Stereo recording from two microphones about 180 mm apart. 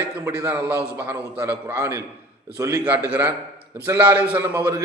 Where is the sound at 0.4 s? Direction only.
10° right (ahead or behind).